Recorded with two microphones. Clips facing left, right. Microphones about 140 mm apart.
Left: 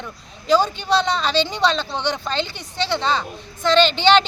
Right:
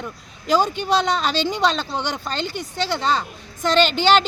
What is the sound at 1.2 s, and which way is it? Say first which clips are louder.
Speech: left 1 dB; 10° right (ahead or behind).